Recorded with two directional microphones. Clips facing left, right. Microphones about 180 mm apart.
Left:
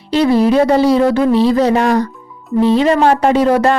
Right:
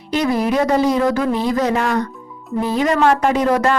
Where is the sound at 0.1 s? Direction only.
30° left (ahead or behind).